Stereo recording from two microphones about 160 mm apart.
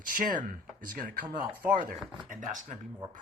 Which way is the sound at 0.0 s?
60° right (ahead or behind).